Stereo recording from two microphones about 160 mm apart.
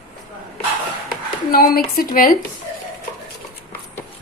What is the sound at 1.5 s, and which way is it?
Speech, 65° left (ahead or behind).